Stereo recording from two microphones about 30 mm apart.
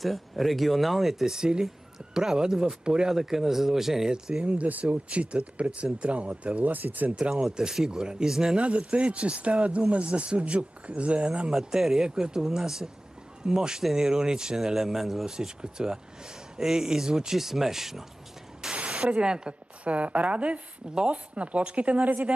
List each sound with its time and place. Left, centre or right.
0.0 s speech: centre
1.2 s speech: right
3.1 s speech: centre
4.1 s speech: right
6.6 s speech: right
7.1 s speech: right
8.5 s speech: right
11.5 s speech: centre
15.3 s speech: right
17.4 s speech: centre
18.6 s a sound: centre
19.1 s speech: right
19.8 s speech: right
22.0 s speech: right